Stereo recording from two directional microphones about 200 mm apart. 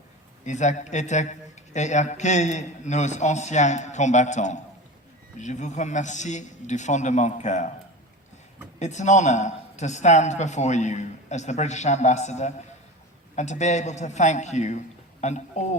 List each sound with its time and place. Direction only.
0.4 s a man's voice: 35° left (ahead or behind)
8.8 s a man's voice: 35° left (ahead or behind)